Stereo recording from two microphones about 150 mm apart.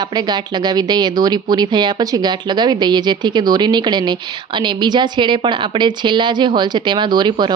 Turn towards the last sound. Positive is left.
turn(degrees=-30)  # may be behind; listen again after turning